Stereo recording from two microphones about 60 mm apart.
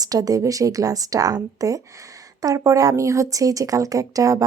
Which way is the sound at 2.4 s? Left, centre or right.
Right.